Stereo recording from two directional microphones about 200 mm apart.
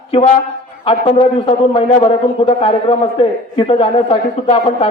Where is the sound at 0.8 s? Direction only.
25° left (ahead or behind).